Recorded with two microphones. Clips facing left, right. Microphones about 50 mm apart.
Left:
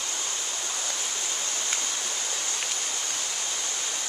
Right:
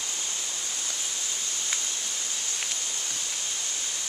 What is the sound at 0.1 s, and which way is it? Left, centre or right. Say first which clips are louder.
Stream: left 2 dB; left.